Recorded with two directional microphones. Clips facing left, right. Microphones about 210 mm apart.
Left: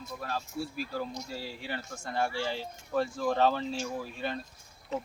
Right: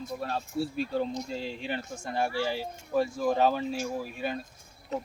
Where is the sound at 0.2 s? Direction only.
30° right (ahead or behind).